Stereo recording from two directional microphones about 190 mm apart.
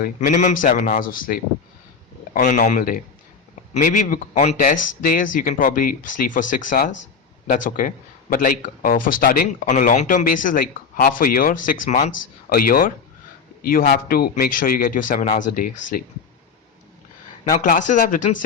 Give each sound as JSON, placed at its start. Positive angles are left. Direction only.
{"t": 0.0, "sound": "a man's voice", "side_deg": 45}
{"t": 17.5, "sound": "a man's voice", "side_deg": 45}